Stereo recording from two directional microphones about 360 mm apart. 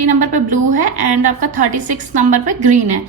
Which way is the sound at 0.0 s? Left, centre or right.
Right.